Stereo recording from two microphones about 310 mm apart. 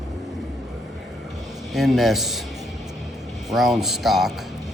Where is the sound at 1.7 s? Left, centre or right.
Centre.